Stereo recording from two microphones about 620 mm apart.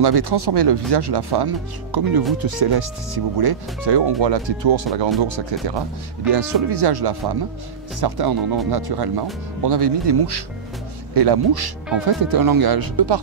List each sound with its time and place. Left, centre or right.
0.0 s speech: right